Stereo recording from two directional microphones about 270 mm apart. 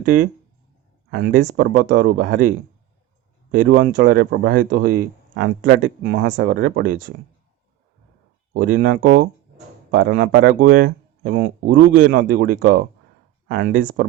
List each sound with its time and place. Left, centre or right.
1.1 s speech: right
8.5 s speech: right